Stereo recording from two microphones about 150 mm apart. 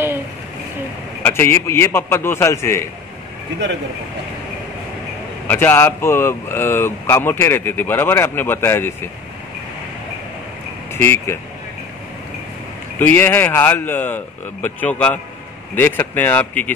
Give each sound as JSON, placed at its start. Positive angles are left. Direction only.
{"t": 1.2, "sound": "speech", "side_deg": 15}
{"t": 5.5, "sound": "speech", "side_deg": 15}
{"t": 10.9, "sound": "speech", "side_deg": 15}
{"t": 13.0, "sound": "speech", "side_deg": 15}